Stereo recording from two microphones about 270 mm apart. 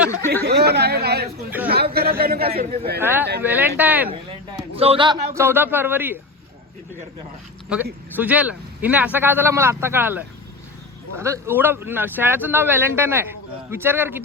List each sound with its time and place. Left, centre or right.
0.4 s speech: right
3.0 s speech: centre
4.8 s speech: centre
8.1 s speech: centre